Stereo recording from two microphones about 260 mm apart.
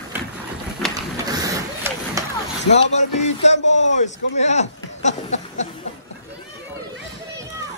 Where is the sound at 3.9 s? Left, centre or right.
Left.